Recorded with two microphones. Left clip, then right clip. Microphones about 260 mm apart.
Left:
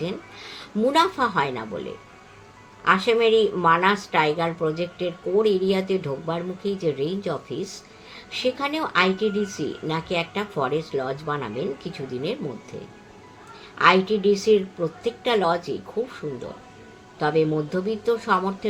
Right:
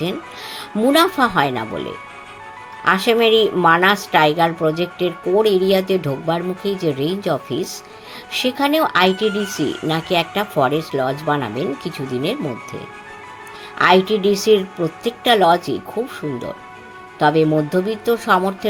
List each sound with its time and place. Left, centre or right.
0.0 s a woman's voice: right
13.7 s a woman's voice: right
17.2 s a woman's voice: right